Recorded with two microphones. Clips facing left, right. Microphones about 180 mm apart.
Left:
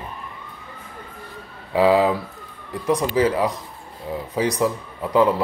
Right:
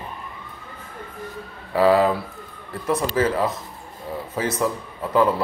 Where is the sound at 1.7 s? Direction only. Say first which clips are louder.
Even; 15° left (ahead or behind).